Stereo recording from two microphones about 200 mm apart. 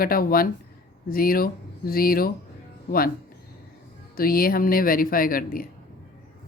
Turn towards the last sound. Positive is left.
turn(degrees=45)  # may be behind; listen again after turning